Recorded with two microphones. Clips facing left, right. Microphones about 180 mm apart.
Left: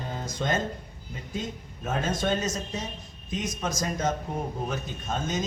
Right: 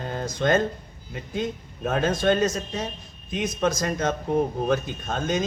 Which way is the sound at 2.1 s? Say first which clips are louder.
Right 6 dB; 60° right (ahead or behind).